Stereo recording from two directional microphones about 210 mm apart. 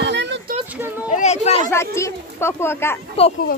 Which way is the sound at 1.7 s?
15° left (ahead or behind).